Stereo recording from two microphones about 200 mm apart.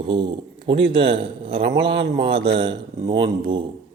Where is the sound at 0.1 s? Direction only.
25° right (ahead or behind).